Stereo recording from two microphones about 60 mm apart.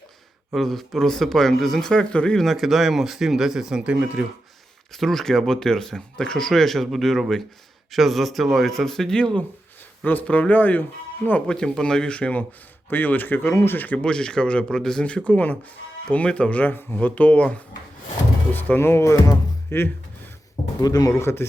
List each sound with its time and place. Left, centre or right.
0.5 s speech: centre
2.4 s speech: centre; by 4.3 s right
4.9 s speech: centre
10.0 s speech: left
12.9 s speech: left
14.0 s speech: centre
18.8 s speech: left
19.7 s a man's voice: left
20.8 s speech: left
21.1 s a man's voice: left